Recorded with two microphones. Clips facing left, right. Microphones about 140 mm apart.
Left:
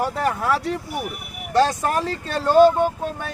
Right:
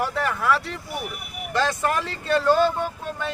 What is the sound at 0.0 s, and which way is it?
Speech, 40° left (ahead or behind).